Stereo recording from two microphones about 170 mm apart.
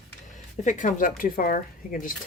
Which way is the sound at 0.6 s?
50° left (ahead or behind).